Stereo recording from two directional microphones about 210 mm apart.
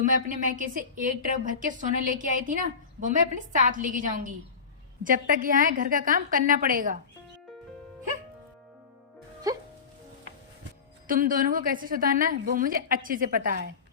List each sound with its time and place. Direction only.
0.0 s a woman's voice: 40° right (ahead or behind)
9.5 s speech: 15° right (ahead or behind)
11.0 s a woman's voice: 40° right (ahead or behind)